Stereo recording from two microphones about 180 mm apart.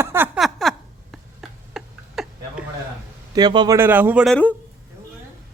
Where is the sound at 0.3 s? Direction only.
Centre (ahead or behind).